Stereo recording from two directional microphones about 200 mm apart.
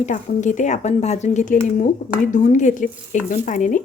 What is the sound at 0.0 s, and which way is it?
Speech, 40° left (ahead or behind).